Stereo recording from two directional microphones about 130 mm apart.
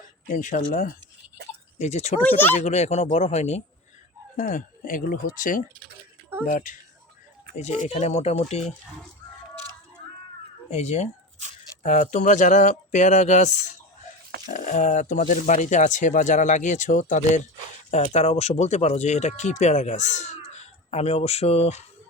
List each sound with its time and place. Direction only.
0.3 s speech: 90° left
1.8 s speech: 60° left (ahead or behind)
2.2 s speech: 15° left (ahead or behind)
2.6 s speech: 55° left (ahead or behind)
4.4 s speech: 75° left (ahead or behind)
7.5 s speech: 65° left (ahead or behind)
10.7 s speech: 60° left (ahead or behind)
11.8 s speech: 70° left (ahead or behind)
17.9 s speech: 55° left (ahead or behind)